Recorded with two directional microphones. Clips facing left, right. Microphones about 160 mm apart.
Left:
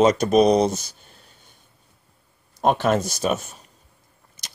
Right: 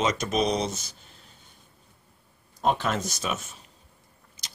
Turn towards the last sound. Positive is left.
turn(degrees=40)  # may be behind; listen again after turning